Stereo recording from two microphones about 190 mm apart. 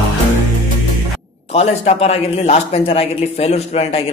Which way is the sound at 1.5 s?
35° left (ahead or behind).